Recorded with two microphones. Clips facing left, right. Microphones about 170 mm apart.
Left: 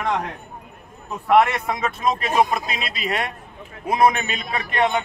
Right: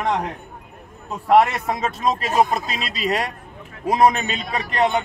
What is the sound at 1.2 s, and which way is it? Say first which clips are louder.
A man's voice: right 1 dB; 35° right (ahead or behind).